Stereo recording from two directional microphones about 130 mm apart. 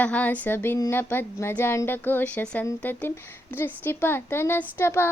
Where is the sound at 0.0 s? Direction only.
10° left (ahead or behind).